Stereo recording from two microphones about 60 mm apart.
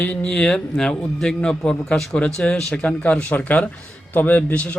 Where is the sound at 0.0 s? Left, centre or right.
Left.